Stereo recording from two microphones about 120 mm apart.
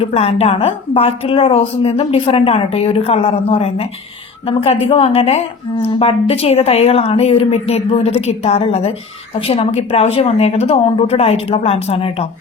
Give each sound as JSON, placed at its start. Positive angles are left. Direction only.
{"t": 0.0, "sound": "a woman's voice", "side_deg": 55}